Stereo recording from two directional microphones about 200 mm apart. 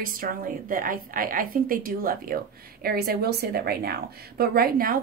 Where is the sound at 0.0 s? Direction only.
45° right (ahead or behind).